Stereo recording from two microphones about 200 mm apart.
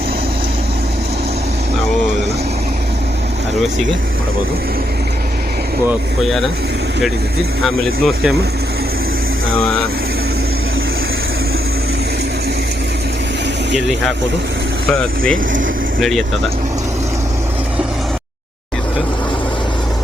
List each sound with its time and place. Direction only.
6.2 s speech: centre (ahead or behind)
7.6 s speech: centre (ahead or behind)
14.9 s speech: 5° left (ahead or behind)